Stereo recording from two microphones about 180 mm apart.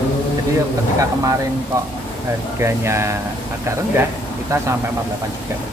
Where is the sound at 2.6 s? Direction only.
15° right (ahead or behind).